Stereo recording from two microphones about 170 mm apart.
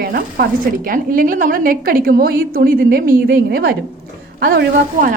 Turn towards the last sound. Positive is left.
turn(degrees=-60)  # may be behind; listen again after turning